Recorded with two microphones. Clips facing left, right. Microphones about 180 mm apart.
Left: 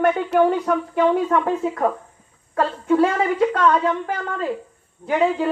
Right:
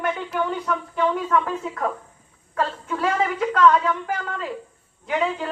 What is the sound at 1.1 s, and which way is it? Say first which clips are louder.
Speech: left 4 dB; 35° left (ahead or behind).